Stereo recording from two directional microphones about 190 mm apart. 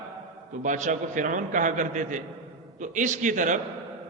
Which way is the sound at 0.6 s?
40° right (ahead or behind).